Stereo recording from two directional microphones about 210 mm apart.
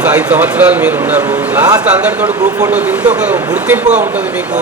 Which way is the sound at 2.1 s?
5° right (ahead or behind).